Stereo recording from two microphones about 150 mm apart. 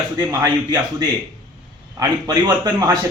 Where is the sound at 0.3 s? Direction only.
25° right (ahead or behind).